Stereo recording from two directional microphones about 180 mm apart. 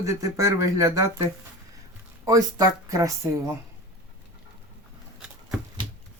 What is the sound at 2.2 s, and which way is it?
Speech, 20° right (ahead or behind).